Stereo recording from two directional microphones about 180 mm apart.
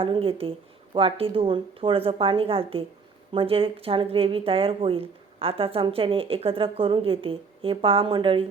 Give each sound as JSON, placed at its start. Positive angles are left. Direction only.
{"t": 0.0, "sound": "speech", "side_deg": -30}